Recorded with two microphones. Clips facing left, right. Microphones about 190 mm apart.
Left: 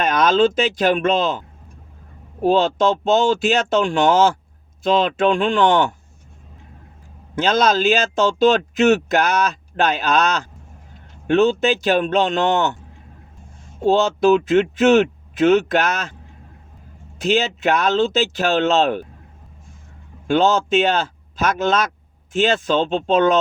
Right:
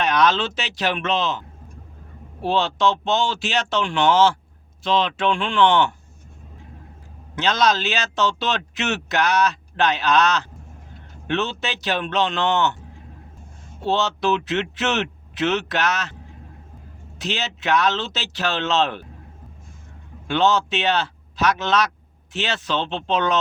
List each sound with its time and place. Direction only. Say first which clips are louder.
0.0 s speech: left 4 dB; 45° left (ahead or behind)
7.3 s speech: left 3 dB; 50° left (ahead or behind)
14.3 s speech: left 8 dB; 50° left (ahead or behind)
17.2 s speech: left 9 dB; 50° left (ahead or behind)
20.2 s speech: left 3 dB; 45° left (ahead or behind)